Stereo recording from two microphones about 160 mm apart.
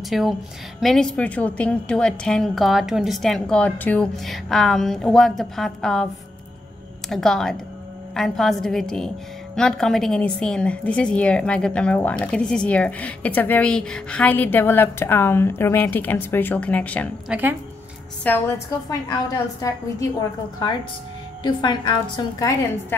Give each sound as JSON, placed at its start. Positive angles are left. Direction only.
{"t": 0.1, "sound": "a woman's voice", "side_deg": 0}
{"t": 7.1, "sound": "a woman's voice", "side_deg": 0}
{"t": 17.3, "sound": "speech", "side_deg": -10}
{"t": 18.2, "sound": "a woman's voice", "side_deg": 15}